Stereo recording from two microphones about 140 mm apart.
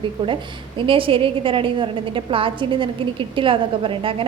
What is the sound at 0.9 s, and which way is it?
A woman's voice, 40° right (ahead or behind).